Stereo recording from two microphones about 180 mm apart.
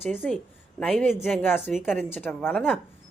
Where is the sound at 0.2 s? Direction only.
5° left (ahead or behind).